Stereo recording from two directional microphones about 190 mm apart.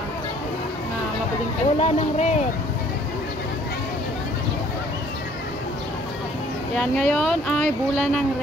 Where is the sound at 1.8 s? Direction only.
35° left (ahead or behind).